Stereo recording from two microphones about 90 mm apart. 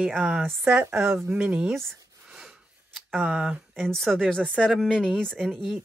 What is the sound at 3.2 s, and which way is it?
Speech, 10° right (ahead or behind).